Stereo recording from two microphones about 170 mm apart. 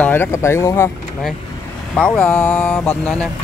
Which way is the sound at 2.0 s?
10° left (ahead or behind).